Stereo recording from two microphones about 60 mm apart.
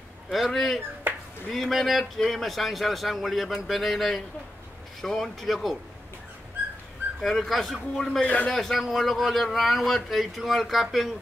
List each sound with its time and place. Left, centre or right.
0.3 s a man's voice: centre
7.2 s a man's voice: centre
8.2 s a man's voice: left
8.5 s a man's voice: centre